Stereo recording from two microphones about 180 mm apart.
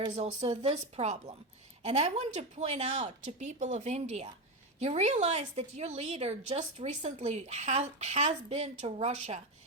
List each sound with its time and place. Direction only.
0.2 s a woman's voice: 40° right (ahead or behind)